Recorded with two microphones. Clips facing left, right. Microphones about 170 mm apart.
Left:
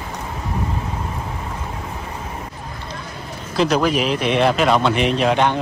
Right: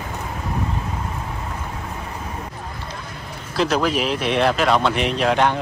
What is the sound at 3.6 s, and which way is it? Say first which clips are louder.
Speech: left 2 dB; centre (ahead or behind).